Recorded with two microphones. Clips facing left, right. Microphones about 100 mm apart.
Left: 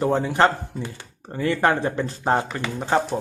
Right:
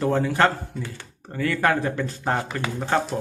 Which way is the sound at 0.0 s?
20° left (ahead or behind).